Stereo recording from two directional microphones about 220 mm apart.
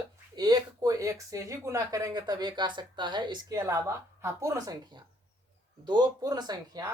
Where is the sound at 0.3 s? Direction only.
15° right (ahead or behind).